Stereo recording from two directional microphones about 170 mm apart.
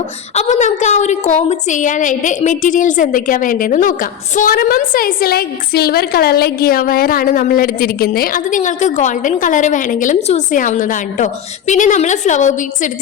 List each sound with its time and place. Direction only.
0.3 s a woman's voice: 45° left (ahead or behind)